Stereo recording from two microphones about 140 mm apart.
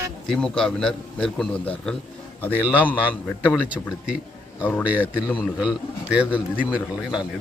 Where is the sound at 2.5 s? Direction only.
10° right (ahead or behind).